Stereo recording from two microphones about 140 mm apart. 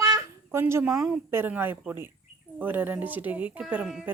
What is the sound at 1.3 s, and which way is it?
Speech, 15° right (ahead or behind).